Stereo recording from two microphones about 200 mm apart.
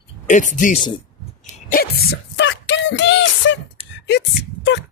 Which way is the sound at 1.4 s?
45° left (ahead or behind).